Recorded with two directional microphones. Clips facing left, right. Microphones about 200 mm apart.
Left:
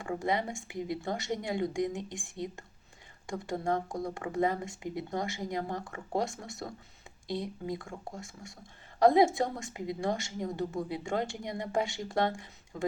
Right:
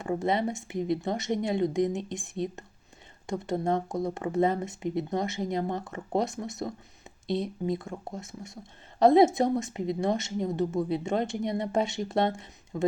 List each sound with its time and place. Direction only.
0.0 s speech: 20° right (ahead or behind)